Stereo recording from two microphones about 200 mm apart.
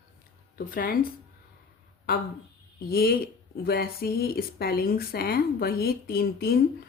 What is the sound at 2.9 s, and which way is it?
Speech, 50° left (ahead or behind).